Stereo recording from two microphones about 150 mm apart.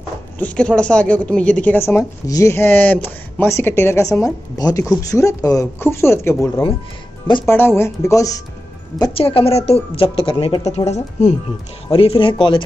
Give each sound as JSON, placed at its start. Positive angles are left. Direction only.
{"t": 0.4, "sound": "speech", "side_deg": 5}
{"t": 7.4, "sound": "speech", "side_deg": 15}
{"t": 9.2, "sound": "a woman's voice", "side_deg": 40}
{"t": 11.9, "sound": "a woman's voice", "side_deg": 35}